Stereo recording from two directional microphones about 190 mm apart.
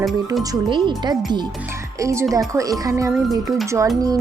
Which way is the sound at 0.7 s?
25° right (ahead or behind).